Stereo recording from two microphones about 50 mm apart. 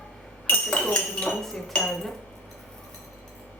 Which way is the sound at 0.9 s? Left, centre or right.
Left.